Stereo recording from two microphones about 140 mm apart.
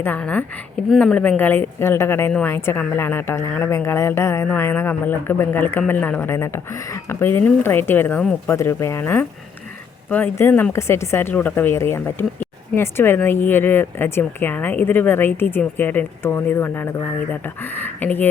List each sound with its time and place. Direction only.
0.0 s speech: 10° left (ahead or behind)